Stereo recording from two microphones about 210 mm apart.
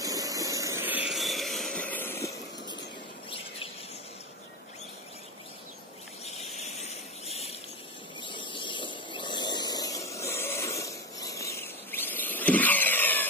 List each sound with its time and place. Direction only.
0.0 s hiss: 15° right (ahead or behind); by 2.8 s 15° left (ahead or behind)
6.5 s a sound: 30° left (ahead or behind)
8.2 s vehicle: 20° left (ahead or behind)